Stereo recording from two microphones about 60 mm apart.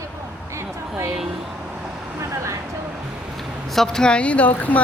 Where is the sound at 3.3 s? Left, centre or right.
Centre; by 4.8 s left.